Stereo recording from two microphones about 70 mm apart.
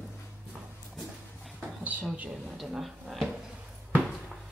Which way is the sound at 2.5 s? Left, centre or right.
Centre.